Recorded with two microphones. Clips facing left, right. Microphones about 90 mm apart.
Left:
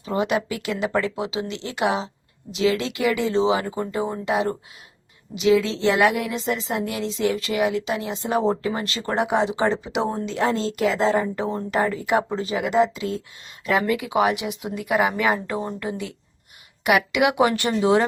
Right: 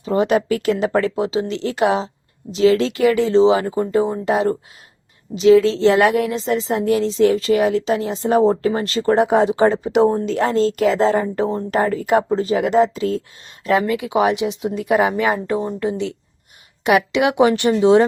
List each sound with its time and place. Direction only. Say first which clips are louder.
0.0 s a woman's voice: right 6 dB; 30° right (ahead or behind)
5.9 s a woman's voice: right 2 dB; centre (ahead or behind)
6.2 s a woman's voice: right 6 dB; 35° right (ahead or behind)
13.8 s speech: right 3 dB; 25° right (ahead or behind)